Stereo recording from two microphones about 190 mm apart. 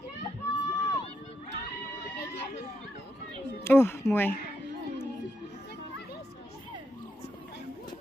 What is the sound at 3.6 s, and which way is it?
Speech, 10° left (ahead or behind).